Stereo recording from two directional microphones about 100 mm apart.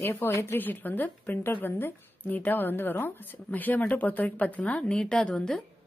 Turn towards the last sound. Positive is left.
turn(degrees=10)  # may be behind; listen again after turning